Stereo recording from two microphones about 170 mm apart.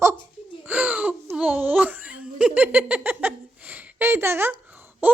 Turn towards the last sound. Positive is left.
turn(degrees=-10)  # may be behind; listen again after turning